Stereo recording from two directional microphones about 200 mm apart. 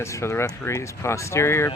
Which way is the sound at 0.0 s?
15° left (ahead or behind).